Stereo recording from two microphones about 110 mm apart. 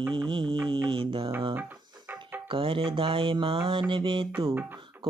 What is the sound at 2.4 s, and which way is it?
Speech, 50° right (ahead or behind).